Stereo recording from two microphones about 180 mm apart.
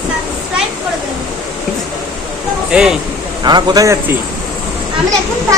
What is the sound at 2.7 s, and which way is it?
Speech, 5° right (ahead or behind).